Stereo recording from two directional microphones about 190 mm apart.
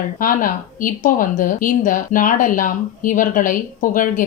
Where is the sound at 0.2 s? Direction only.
45° left (ahead or behind).